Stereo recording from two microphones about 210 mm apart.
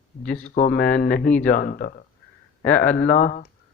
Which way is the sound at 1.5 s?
40° left (ahead or behind).